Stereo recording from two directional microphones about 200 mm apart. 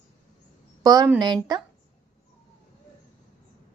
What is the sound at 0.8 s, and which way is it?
Speech, 20° right (ahead or behind).